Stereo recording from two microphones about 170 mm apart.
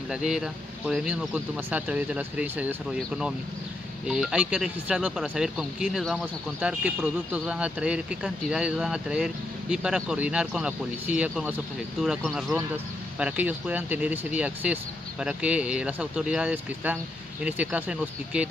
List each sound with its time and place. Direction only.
0.1 s speech: 5° right (ahead or behind)